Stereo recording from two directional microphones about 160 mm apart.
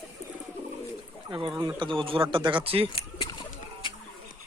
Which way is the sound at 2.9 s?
25° left (ahead or behind).